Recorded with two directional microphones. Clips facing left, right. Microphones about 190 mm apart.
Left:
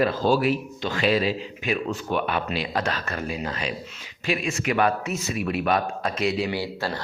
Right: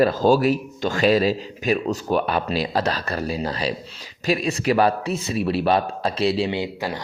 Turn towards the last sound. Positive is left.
turn(degrees=-15)  # may be behind; listen again after turning